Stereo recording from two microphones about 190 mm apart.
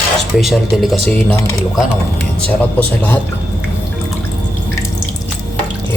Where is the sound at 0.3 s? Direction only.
Centre (ahead or behind).